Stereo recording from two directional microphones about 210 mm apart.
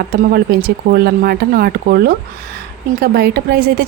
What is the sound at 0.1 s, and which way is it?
A woman's voice, 45° right (ahead or behind).